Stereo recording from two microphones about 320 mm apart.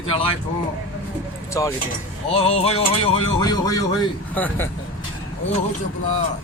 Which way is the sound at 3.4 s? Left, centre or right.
Centre.